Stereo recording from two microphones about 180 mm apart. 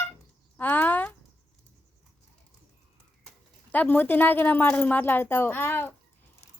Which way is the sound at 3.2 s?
10° left (ahead or behind).